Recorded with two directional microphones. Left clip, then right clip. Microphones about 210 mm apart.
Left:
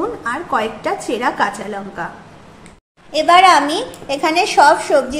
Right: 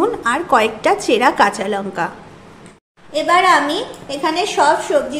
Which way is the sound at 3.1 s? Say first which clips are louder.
Left 3 dB; 30° left (ahead or behind).